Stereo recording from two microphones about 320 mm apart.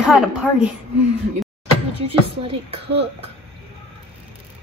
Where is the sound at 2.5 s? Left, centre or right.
Centre.